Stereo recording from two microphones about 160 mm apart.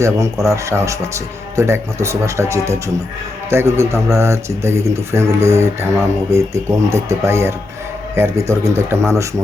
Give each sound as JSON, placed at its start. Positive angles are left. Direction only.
{"t": 0.0, "sound": "speech", "side_deg": -20}